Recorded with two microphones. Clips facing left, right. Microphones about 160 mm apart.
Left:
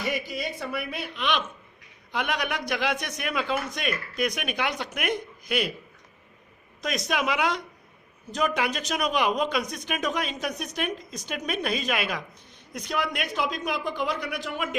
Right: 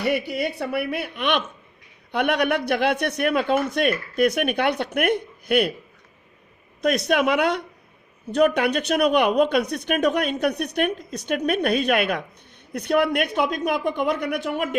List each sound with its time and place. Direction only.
0.0 s speech: 65° right (ahead or behind)
6.8 s speech: 60° right (ahead or behind)